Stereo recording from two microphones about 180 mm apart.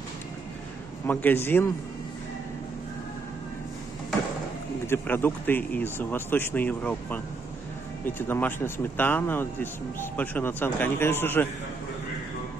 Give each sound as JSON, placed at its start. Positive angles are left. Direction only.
{"t": 1.0, "sound": "speech", "side_deg": 10}
{"t": 4.8, "sound": "speech", "side_deg": 10}